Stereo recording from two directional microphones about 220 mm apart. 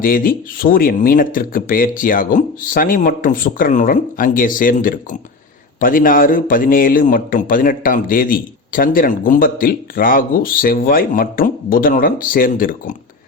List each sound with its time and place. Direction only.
0.0 s a man's voice: 40° left (ahead or behind)